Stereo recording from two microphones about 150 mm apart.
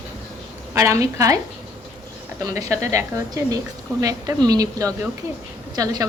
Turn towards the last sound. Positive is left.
turn(degrees=-25)  # may be behind; listen again after turning